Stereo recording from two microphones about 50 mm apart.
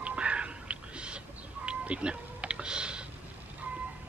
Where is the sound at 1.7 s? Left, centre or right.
Right.